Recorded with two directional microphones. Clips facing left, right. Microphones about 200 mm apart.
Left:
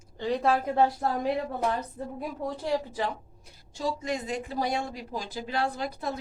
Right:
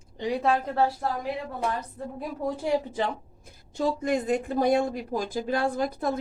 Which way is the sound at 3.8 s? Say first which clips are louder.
Right 5 dB; 55° right (ahead or behind).